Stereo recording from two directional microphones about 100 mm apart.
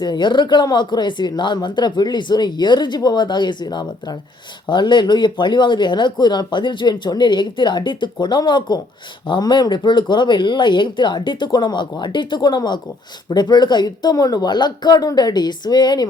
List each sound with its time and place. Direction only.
0.0 s speech: 50° left (ahead or behind)